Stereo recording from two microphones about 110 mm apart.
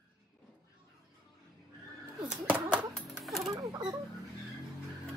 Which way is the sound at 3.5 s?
30° right (ahead or behind).